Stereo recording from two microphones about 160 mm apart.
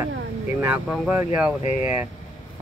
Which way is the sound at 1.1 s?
10° right (ahead or behind).